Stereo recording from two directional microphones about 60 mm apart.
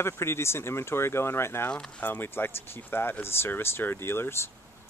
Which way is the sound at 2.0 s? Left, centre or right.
Left.